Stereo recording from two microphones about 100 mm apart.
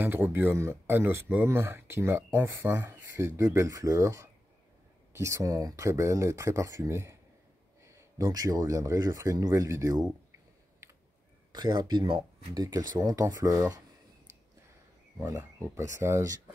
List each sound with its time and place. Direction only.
0.0 s speech: 20° right (ahead or behind)
11.5 s speech: 45° right (ahead or behind)
15.2 s speech: 30° right (ahead or behind)